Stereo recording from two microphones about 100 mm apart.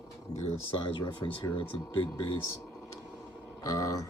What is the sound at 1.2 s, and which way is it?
Speech, 40° left (ahead or behind).